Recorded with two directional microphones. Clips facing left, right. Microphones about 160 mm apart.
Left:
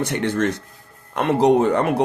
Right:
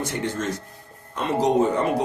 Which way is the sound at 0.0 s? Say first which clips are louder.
Left 6 dB; 70° left (ahead or behind).